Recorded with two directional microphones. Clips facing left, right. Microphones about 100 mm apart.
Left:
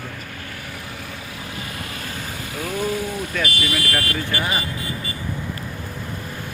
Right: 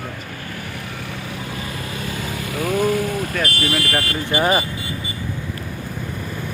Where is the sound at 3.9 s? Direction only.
25° right (ahead or behind).